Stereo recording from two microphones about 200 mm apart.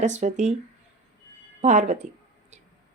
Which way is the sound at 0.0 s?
35° right (ahead or behind).